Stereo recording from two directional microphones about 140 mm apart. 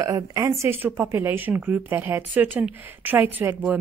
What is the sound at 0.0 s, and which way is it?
Speech, 25° right (ahead or behind).